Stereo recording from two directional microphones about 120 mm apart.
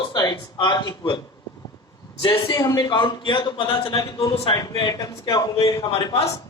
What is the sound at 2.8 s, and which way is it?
A man's voice, 45° left (ahead or behind).